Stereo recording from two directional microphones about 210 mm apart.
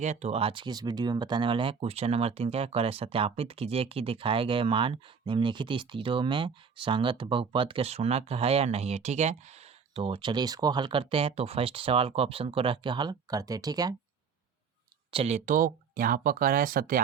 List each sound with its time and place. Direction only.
0.0 s speech: 35° right (ahead or behind); by 13.9 s 15° right (ahead or behind)
15.1 s speech: 30° right (ahead or behind)